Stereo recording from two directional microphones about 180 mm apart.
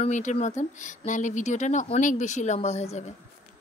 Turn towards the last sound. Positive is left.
turn(degrees=40)  # may be behind; listen again after turning